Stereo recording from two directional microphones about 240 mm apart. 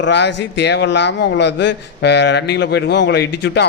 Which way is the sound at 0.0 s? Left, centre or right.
Left.